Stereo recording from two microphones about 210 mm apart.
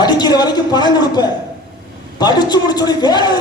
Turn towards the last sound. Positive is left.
turn(degrees=20)  # may be behind; listen again after turning